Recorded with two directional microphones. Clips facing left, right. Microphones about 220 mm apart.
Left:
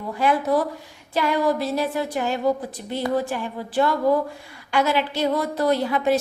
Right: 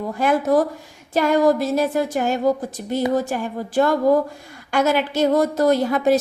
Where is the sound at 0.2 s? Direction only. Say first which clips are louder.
Right 3 dB; 45° right (ahead or behind).